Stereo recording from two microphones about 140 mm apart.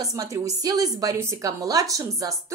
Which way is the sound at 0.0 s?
25° right (ahead or behind).